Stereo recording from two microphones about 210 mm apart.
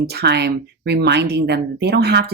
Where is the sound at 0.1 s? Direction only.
50° right (ahead or behind).